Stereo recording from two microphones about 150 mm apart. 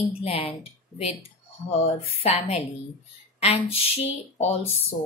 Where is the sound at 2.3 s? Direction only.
45° left (ahead or behind).